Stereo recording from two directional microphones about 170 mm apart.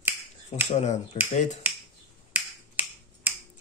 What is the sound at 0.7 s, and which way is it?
Speech, 40° left (ahead or behind).